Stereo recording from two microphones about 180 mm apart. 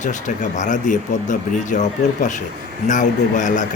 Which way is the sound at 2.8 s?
45° left (ahead or behind).